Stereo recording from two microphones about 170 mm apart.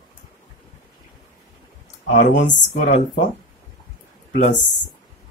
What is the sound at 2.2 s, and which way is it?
Speech, 90° left.